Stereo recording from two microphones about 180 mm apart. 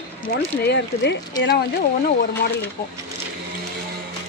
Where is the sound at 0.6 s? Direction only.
70° left (ahead or behind).